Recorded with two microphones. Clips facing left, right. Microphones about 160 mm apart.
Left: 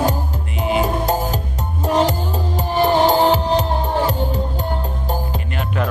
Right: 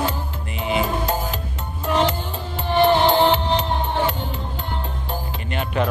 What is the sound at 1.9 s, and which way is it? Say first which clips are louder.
Music: left 3 dB; 40° left (ahead or behind).